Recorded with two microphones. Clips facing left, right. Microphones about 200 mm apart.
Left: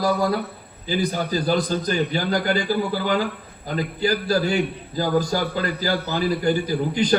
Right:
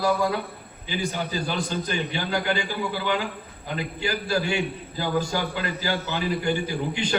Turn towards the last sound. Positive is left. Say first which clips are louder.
# left 5 dB
turn(degrees=40)  # may be behind; listen again after turning